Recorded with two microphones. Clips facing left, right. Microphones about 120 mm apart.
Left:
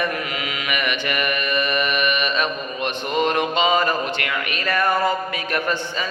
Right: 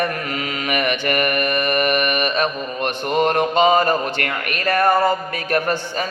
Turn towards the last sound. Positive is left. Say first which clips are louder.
# right 3 dB
turn(degrees=-40)  # may be behind; listen again after turning